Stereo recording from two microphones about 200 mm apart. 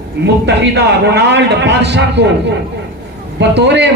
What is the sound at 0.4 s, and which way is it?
A man's voice, 60° right (ahead or behind).